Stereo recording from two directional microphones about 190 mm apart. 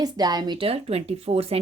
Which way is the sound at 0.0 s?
20° right (ahead or behind).